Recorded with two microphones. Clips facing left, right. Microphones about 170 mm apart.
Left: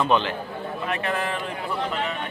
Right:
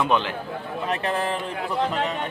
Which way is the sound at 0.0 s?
10° right (ahead or behind).